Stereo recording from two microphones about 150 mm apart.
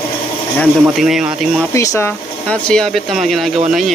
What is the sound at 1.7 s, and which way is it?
Speech, 20° left (ahead or behind).